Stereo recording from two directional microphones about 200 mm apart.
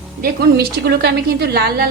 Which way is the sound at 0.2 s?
50° right (ahead or behind).